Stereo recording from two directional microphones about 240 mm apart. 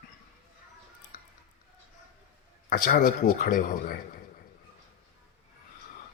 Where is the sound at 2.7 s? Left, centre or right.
Left.